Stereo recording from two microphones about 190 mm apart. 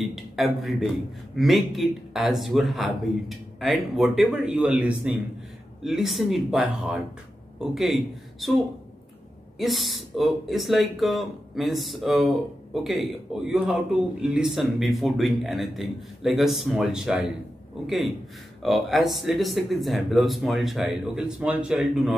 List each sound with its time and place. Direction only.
0.0 s a man's voice: centre (ahead or behind)
9.6 s a man's voice: centre (ahead or behind)